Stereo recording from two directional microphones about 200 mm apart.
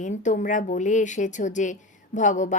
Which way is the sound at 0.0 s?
40° left (ahead or behind).